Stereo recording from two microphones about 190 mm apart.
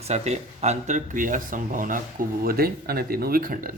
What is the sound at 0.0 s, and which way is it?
Speech, 35° right (ahead or behind).